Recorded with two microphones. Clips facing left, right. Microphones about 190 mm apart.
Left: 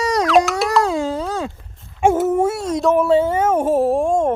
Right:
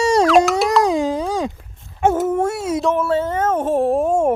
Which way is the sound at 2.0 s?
10° left (ahead or behind).